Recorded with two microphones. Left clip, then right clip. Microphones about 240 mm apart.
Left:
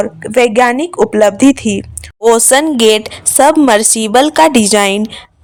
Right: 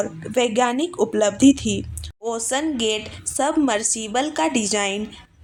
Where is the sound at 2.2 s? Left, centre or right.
Left.